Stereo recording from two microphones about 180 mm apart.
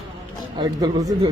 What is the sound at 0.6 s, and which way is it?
Speech, 25° right (ahead or behind).